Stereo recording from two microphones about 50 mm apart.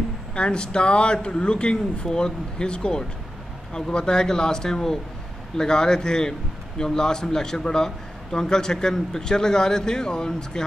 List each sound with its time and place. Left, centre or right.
0.3 s a man's voice: centre